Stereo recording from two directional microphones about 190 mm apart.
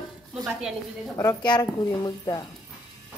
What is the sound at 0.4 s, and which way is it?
Speech, 5° right (ahead or behind).